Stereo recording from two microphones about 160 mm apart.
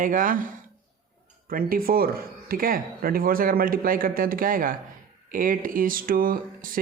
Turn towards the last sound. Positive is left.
turn(degrees=-60)  # may be behind; listen again after turning